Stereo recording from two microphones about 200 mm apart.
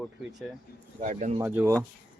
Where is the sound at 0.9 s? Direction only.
40° right (ahead or behind).